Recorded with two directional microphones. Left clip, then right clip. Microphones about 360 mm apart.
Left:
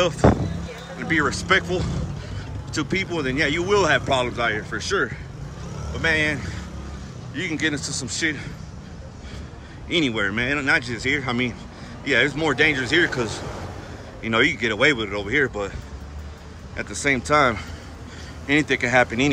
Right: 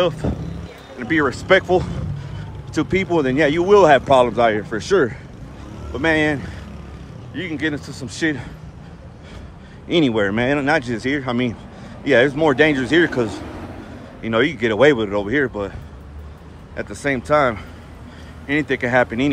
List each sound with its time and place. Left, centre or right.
0.9 s speech: centre
9.8 s speech: centre
16.7 s speech: centre